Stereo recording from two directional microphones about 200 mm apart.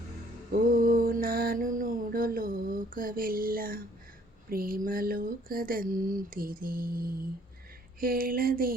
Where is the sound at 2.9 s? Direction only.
45° right (ahead or behind).